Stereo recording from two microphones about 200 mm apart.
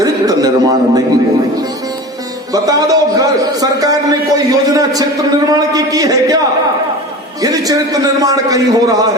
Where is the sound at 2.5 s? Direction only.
20° right (ahead or behind).